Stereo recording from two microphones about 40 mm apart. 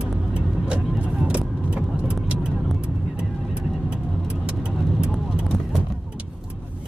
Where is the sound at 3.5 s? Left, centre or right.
Right.